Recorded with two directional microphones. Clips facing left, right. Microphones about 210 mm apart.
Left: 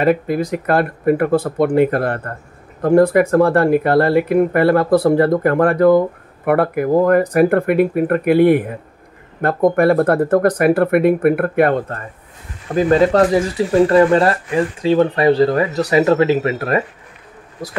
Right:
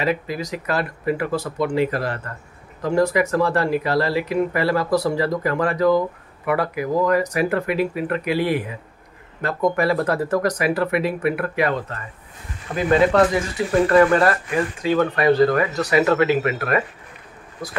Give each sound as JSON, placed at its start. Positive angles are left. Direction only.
{"t": 0.0, "sound": "speech", "side_deg": 55}
{"t": 12.7, "sound": "speech", "side_deg": 35}